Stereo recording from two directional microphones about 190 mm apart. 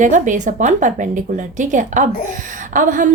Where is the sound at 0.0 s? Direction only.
40° right (ahead or behind).